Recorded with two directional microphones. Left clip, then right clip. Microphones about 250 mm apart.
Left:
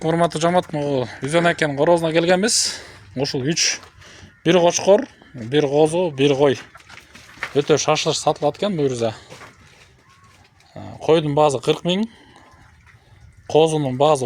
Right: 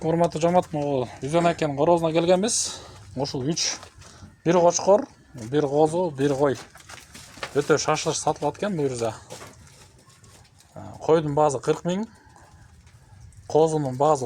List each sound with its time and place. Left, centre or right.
0.0 s speech: left
7.5 s speech: left
10.8 s speech: left
13.5 s speech: left